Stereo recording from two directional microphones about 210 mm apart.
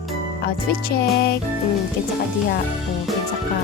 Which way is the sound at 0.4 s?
50° left (ahead or behind).